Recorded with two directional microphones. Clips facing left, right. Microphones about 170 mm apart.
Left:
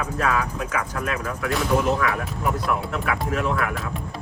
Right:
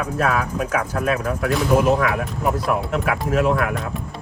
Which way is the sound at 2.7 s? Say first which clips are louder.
Right 4 dB; 40° right (ahead or behind).